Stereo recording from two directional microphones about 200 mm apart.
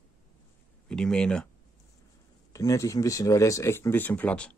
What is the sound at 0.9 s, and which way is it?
Speech, 5° left (ahead or behind).